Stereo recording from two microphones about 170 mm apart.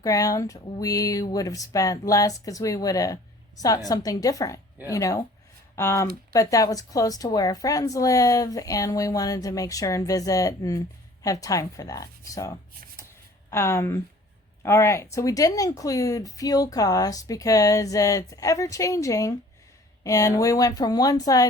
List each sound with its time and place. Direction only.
0.0 s a woman's voice: 20° left (ahead or behind)